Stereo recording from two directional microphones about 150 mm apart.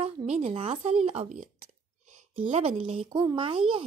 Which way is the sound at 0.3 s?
45° right (ahead or behind).